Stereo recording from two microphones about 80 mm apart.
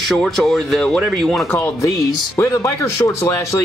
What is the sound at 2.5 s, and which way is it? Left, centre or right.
Speech, left.